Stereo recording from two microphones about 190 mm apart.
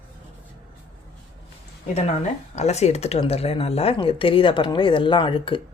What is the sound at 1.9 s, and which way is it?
Speech, 35° left (ahead or behind).